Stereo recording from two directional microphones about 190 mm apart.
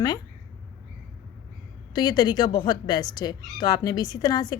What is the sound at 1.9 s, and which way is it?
Speech, 20° left (ahead or behind).